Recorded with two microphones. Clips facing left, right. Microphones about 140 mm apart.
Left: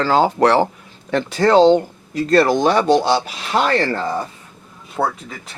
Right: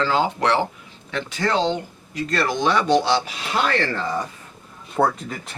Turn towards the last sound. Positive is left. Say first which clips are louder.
# right 1 dB
turn(degrees=0)  # may be behind; listen again after turning